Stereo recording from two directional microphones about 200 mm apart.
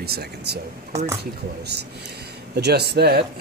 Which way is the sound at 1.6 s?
55° right (ahead or behind).